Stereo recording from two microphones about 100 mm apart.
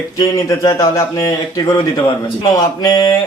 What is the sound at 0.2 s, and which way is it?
Speech, 35° left (ahead or behind).